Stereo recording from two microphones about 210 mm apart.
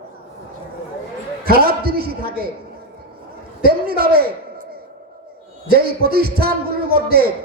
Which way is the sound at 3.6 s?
45° right (ahead or behind).